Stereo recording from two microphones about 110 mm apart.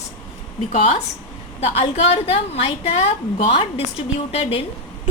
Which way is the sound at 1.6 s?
60° left (ahead or behind).